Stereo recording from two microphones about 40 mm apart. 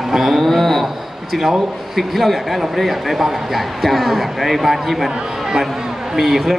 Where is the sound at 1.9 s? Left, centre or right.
Centre.